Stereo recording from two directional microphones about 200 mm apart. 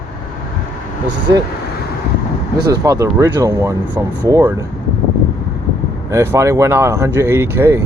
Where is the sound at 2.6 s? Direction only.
20° right (ahead or behind).